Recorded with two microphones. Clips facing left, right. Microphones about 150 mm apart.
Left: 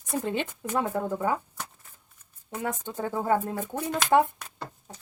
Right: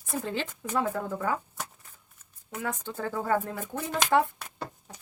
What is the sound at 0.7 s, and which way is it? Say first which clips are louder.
Speech: left 1 dB; 25° left (ahead or behind).